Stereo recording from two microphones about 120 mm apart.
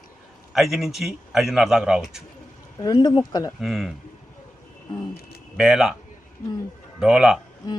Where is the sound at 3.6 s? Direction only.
Centre (ahead or behind).